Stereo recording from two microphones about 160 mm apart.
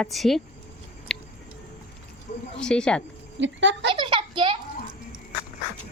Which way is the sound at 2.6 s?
5° left (ahead or behind).